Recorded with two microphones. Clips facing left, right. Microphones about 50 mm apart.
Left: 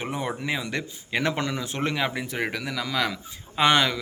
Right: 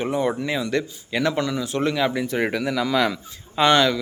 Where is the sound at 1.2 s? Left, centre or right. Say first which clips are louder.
Right 5 dB; left.